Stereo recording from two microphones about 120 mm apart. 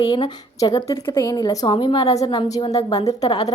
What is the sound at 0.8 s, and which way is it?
A woman's voice, 25° left (ahead or behind).